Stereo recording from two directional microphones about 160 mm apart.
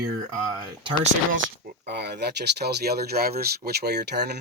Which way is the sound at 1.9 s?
90° right.